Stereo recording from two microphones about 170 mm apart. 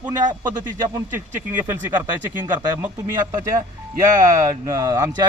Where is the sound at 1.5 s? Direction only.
10° right (ahead or behind).